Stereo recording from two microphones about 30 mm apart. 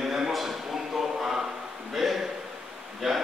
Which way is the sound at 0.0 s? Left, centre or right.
Centre.